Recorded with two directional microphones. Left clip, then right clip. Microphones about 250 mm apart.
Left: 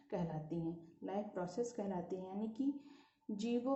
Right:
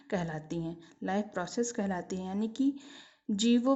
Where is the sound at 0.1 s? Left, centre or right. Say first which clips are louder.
Right 8 dB; right.